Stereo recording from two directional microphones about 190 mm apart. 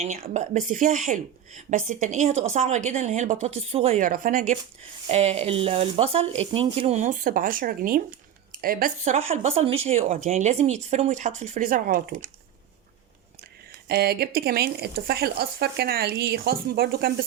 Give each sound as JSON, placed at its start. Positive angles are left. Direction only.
{"t": 0.2, "sound": "a woman's voice", "side_deg": -45}
{"t": 4.0, "sound": "a woman's voice", "side_deg": -45}
{"t": 9.1, "sound": "speech", "side_deg": -35}
{"t": 13.8, "sound": "speech", "side_deg": -55}